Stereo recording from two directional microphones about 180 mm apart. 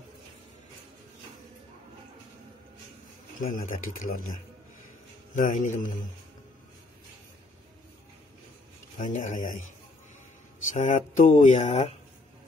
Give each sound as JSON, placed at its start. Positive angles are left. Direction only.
{"t": 3.4, "sound": "speech", "side_deg": 45}
{"t": 8.9, "sound": "speech", "side_deg": 45}
{"t": 10.7, "sound": "speech", "side_deg": 45}